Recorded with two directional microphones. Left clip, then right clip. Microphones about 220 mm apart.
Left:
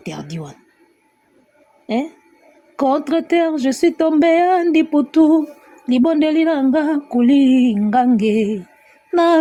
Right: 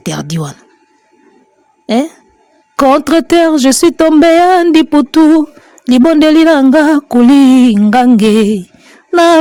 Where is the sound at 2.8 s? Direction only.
40° right (ahead or behind).